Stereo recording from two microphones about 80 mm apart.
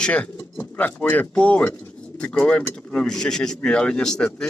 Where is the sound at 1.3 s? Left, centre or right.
Centre.